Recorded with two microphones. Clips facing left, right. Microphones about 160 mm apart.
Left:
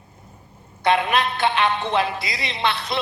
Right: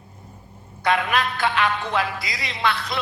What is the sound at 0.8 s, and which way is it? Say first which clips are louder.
A man's voice: left 2 dB; 25° left (ahead or behind).